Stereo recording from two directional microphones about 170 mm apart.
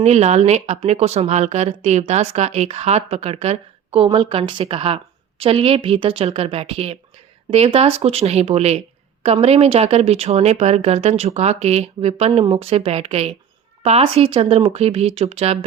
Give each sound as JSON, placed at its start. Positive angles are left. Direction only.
{"t": 0.0, "sound": "a woman's voice", "side_deg": -40}